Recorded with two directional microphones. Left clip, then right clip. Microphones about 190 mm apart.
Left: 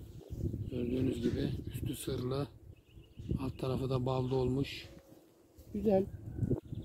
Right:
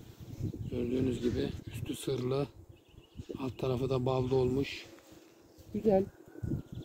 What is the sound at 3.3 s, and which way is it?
A man's voice, 10° right (ahead or behind).